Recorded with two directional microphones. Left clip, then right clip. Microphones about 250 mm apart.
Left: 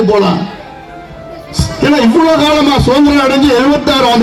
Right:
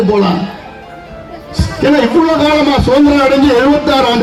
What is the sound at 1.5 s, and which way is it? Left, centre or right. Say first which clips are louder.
A man's voice: even; left.